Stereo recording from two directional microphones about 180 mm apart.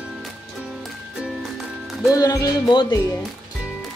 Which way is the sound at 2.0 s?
20° left (ahead or behind).